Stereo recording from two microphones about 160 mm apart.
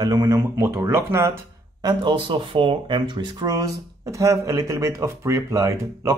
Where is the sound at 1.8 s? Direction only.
30° right (ahead or behind).